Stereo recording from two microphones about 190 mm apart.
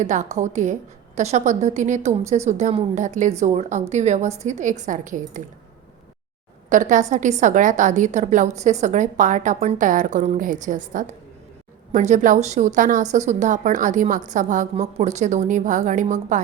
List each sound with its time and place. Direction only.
0.0 s a woman's voice: 40° right (ahead or behind)
6.7 s a woman's voice: 40° right (ahead or behind)